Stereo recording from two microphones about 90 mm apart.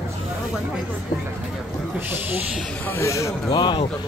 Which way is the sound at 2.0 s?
20° right (ahead or behind).